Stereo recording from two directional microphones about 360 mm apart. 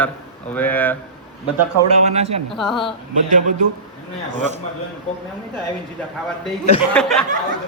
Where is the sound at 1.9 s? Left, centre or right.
Centre.